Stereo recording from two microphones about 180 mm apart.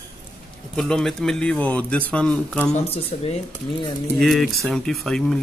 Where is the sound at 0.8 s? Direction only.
Centre (ahead or behind).